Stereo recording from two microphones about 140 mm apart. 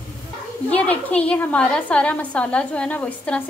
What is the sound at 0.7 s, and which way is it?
A woman's voice, 10° left (ahead or behind).